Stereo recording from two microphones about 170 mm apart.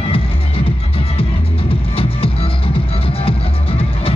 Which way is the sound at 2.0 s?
35° left (ahead or behind).